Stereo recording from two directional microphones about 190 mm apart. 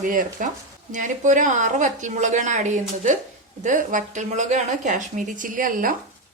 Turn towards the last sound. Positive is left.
turn(degrees=-45)  # may be behind; listen again after turning